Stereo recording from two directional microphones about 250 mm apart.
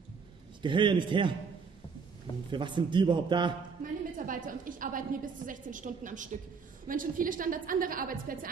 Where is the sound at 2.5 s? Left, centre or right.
Centre.